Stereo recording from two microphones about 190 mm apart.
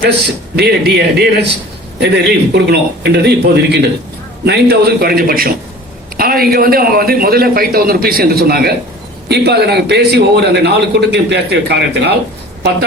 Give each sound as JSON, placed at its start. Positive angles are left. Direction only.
{"t": 0.5, "sound": "a man's voice", "side_deg": -60}